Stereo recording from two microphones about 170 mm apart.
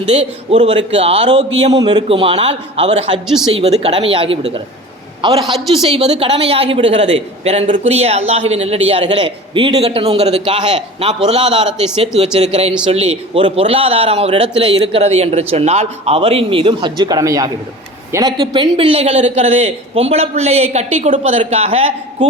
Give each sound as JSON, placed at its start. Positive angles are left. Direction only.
{"t": 0.1, "sound": "a man's voice", "side_deg": -35}
{"t": 1.7, "sound": "a man's voice", "side_deg": -25}